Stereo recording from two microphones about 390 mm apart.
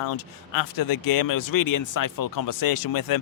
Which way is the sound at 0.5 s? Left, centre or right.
Left.